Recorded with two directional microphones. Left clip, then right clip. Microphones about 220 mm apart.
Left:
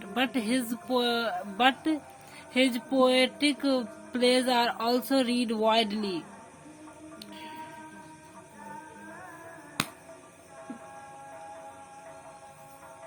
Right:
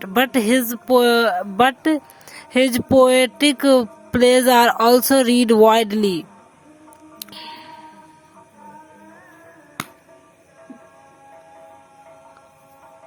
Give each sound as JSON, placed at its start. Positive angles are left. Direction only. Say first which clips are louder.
{"t": 0.0, "sound": "music", "louder": "right 12 dB", "side_deg": -50}